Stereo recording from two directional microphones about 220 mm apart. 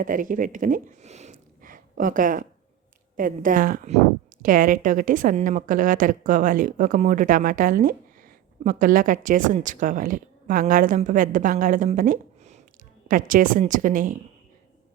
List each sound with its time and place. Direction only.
0.0 s a woman's voice: 40° right (ahead or behind)